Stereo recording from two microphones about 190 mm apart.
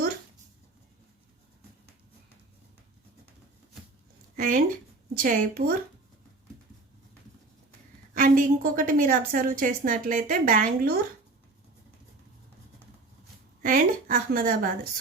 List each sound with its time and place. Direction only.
4.4 s a woman's voice: 45° right (ahead or behind)
8.1 s a woman's voice: 45° right (ahead or behind)
13.6 s a woman's voice: 45° right (ahead or behind)